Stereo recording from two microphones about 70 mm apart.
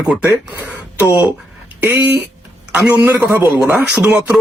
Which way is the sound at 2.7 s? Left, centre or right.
Right.